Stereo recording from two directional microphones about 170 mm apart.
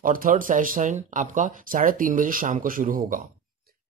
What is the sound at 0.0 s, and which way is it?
Speech, 55° right (ahead or behind).